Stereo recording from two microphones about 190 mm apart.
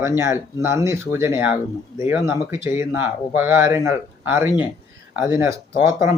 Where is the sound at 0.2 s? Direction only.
15° right (ahead or behind).